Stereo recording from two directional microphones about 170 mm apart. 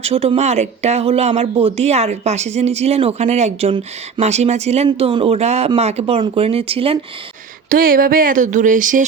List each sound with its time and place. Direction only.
0.0 s speech: 35° right (ahead or behind)
7.7 s speech: 55° right (ahead or behind)